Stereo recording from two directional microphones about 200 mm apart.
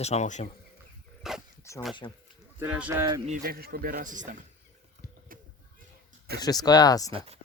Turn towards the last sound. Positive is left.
turn(degrees=-30)  # may be behind; listen again after turning